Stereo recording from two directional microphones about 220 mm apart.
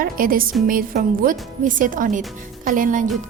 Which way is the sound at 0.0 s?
40° right (ahead or behind).